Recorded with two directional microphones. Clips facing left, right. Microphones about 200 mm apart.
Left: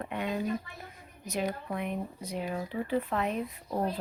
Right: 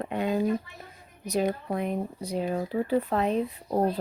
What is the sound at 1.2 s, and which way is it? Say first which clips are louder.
Speech: right 6 dB; 35° right (ahead or behind).